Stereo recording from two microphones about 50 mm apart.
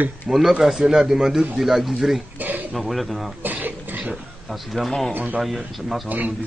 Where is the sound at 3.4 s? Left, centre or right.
Right.